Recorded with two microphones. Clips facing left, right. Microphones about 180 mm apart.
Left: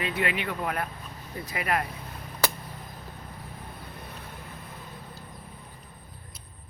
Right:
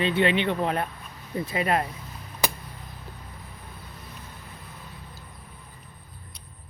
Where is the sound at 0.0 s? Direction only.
25° right (ahead or behind).